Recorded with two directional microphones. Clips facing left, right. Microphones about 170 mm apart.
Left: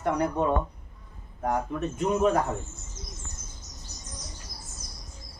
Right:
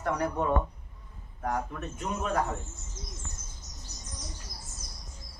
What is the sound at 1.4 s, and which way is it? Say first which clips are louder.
Speech: left 5 dB; 25° left (ahead or behind).